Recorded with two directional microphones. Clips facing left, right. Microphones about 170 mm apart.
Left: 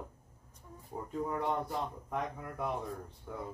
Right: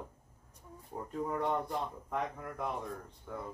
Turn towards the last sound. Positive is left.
turn(degrees=5)  # may be behind; listen again after turning